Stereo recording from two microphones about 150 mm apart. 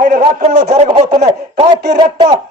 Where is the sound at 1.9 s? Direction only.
30° right (ahead or behind).